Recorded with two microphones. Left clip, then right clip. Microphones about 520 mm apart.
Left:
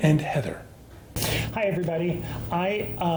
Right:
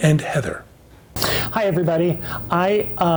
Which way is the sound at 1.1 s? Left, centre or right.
Right.